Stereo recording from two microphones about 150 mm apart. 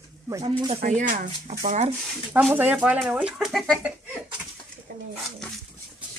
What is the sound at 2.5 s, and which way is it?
Speech, 10° right (ahead or behind).